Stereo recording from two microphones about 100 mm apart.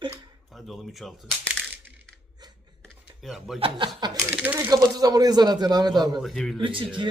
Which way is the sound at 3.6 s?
50° right (ahead or behind).